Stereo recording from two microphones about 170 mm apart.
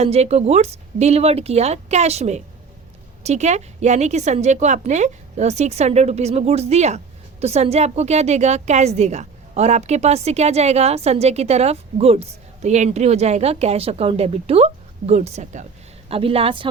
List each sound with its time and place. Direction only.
0.0 s a woman's voice: 40° right (ahead or behind)